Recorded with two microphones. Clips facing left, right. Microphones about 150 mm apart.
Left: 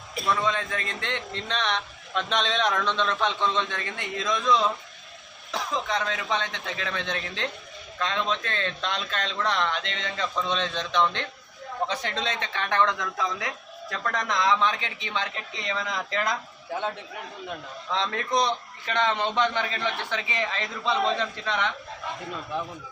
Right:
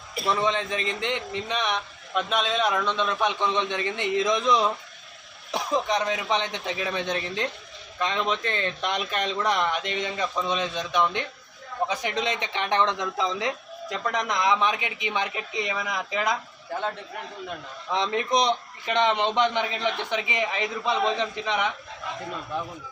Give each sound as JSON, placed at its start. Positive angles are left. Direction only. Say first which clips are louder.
{"t": 0.3, "sound": "a man's voice", "louder": "right 2 dB", "side_deg": -25}
{"t": 17.9, "sound": "a man's voice", "louder": "right 2 dB", "side_deg": -15}